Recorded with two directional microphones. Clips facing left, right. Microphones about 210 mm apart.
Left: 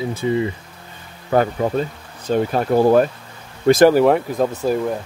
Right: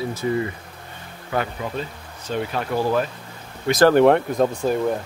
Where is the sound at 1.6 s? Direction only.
40° left (ahead or behind).